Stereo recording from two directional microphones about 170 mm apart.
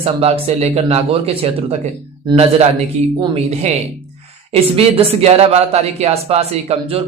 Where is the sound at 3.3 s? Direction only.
40° right (ahead or behind).